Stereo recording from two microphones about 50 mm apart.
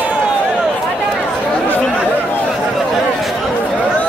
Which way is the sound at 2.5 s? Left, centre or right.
Centre.